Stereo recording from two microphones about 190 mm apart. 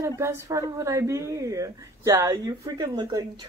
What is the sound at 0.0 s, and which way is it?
A woman's voice, 15° right (ahead or behind).